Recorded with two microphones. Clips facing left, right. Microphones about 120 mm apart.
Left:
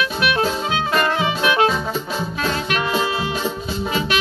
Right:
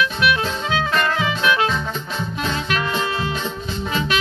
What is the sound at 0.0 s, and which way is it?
Music, 50° left (ahead or behind).